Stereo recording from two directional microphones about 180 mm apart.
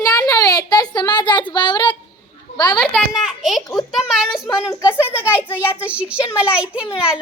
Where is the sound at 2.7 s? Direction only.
Centre (ahead or behind).